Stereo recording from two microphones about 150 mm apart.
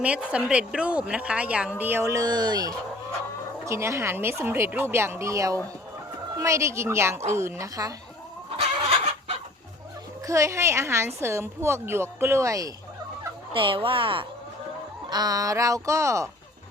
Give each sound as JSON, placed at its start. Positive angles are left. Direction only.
{"t": 0.0, "sound": "a woman's voice", "side_deg": -10}
{"t": 8.5, "sound": "chicken", "side_deg": -40}
{"t": 10.2, "sound": "a woman's voice", "side_deg": -20}
{"t": 13.5, "sound": "a woman's voice", "side_deg": -35}